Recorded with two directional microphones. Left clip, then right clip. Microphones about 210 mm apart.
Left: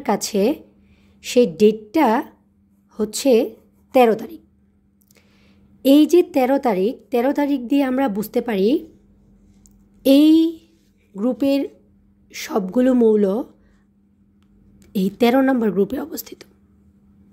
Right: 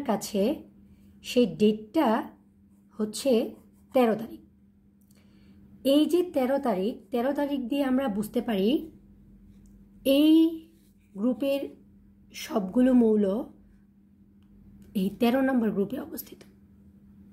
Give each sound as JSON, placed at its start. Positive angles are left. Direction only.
{"t": 0.0, "sound": "a woman's voice", "side_deg": 45}
{"t": 5.8, "sound": "a woman's voice", "side_deg": 45}
{"t": 9.6, "sound": "a sound", "side_deg": 40}
{"t": 11.1, "sound": "a woman's voice", "side_deg": 40}
{"t": 14.8, "sound": "a woman's voice", "side_deg": 45}